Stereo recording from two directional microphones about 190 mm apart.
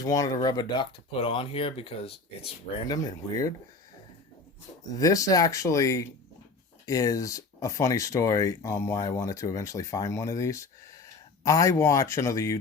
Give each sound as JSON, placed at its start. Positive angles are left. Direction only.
{"t": 0.0, "sound": "speech", "side_deg": 20}
{"t": 4.9, "sound": "speech", "side_deg": 15}